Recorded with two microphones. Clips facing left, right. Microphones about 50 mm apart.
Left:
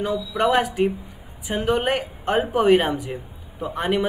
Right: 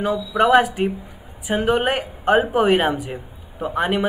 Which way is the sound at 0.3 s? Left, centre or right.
Centre.